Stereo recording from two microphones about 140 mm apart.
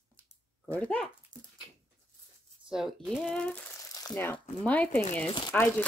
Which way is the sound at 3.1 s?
5° left (ahead or behind).